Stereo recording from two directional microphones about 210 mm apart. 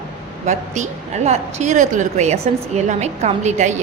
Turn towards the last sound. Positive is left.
turn(degrees=-35)  # may be behind; listen again after turning